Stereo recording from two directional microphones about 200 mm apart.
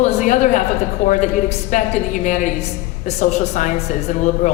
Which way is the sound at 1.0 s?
40° left (ahead or behind).